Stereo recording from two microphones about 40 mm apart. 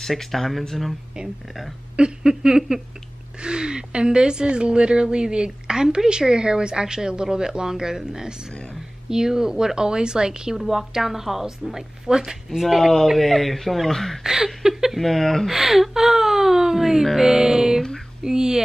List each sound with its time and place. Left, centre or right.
0.0 s speech: centre
2.0 s a woman's voice: right
12.5 s speech: centre
14.2 s a woman's voice: centre
15.0 s speech: centre
15.5 s a woman's voice: centre